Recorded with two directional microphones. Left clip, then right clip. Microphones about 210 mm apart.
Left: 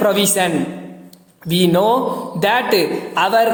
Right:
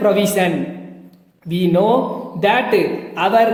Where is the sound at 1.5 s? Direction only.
15° left (ahead or behind).